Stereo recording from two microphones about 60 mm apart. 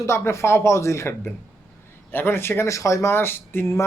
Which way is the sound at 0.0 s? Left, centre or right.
Left.